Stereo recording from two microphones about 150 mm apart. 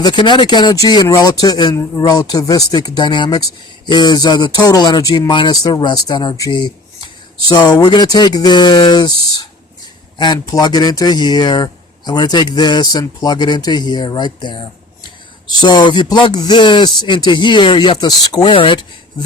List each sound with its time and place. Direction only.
0.0 s a man's voice: 30° left (ahead or behind)